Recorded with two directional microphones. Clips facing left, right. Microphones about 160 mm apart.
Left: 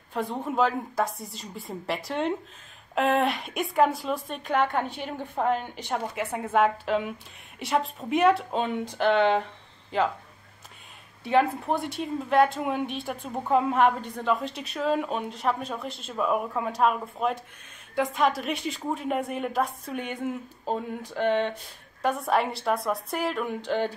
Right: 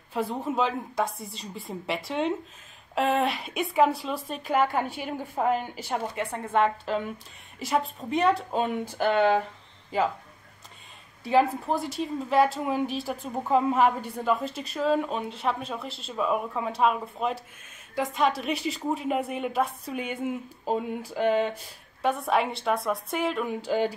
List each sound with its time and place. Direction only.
0.1 s a woman's voice: centre (ahead or behind)
11.2 s a woman's voice: centre (ahead or behind)